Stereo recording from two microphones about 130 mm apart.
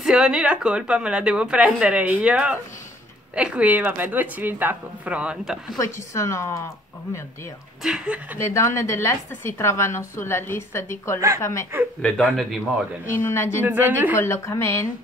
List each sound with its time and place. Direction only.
0.0 s a woman's voice: 5° right (ahead or behind)
5.8 s a woman's voice: 25° left (ahead or behind)
7.8 s speech: 5° right (ahead or behind)
8.4 s a woman's voice: 20° left (ahead or behind)
12.0 s speech: 5° left (ahead or behind)
13.1 s a woman's voice: 20° left (ahead or behind)
13.6 s a woman's voice: 15° right (ahead or behind)
14.1 s a woman's voice: 20° left (ahead or behind)